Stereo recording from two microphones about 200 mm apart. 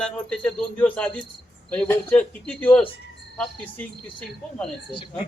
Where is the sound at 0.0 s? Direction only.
5° left (ahead or behind).